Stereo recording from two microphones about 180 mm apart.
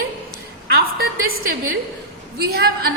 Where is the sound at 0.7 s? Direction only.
55° right (ahead or behind).